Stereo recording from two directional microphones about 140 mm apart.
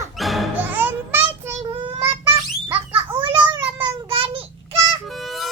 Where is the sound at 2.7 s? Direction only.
40° right (ahead or behind).